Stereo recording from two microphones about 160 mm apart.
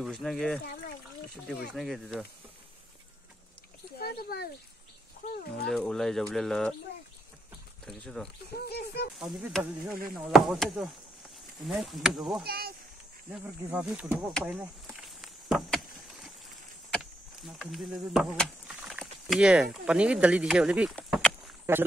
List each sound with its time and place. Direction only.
0.0 s speech: centre (ahead or behind)
4.0 s a sound: 75° left (ahead or behind)
5.7 s speech: 5° left (ahead or behind)
7.8 s speech: 5° left (ahead or behind)
8.6 s speech: 90° left
9.2 s speech: 5° right (ahead or behind)
12.4 s speech: 75° right (ahead or behind)
13.3 s speech: 10° right (ahead or behind)
14.9 s a sound: centre (ahead or behind)
16.9 s speech: centre (ahead or behind)
21.7 s speech: 15° right (ahead or behind)